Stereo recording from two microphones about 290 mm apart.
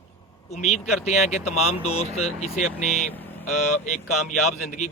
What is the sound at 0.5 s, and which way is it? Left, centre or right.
Speech, left.